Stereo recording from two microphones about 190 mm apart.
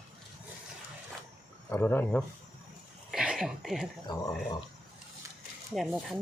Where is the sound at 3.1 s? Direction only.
5° right (ahead or behind).